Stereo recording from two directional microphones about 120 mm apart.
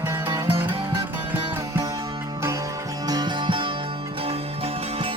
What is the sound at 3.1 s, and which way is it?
Music, 35° right (ahead or behind).